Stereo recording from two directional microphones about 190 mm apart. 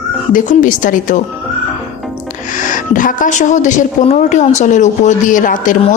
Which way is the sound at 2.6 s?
45° left (ahead or behind).